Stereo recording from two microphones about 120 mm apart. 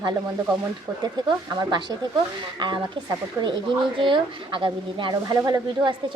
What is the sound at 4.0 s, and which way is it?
A woman's voice, 45° right (ahead or behind).